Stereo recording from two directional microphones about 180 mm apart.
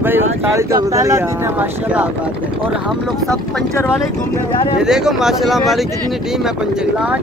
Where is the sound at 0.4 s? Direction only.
15° right (ahead or behind).